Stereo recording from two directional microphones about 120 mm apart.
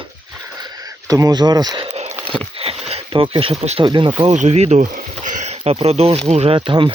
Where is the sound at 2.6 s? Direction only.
55° right (ahead or behind).